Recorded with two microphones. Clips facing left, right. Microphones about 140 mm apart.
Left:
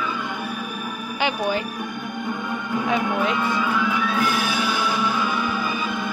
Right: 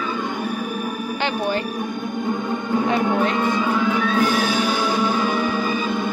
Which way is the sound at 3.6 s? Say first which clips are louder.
Right 3 dB; 30° right (ahead or behind).